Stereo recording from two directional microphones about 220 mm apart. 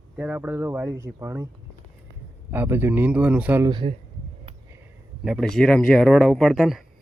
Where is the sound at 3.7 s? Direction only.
20° right (ahead or behind).